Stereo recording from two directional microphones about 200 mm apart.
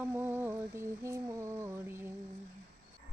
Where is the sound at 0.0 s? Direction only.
10° right (ahead or behind).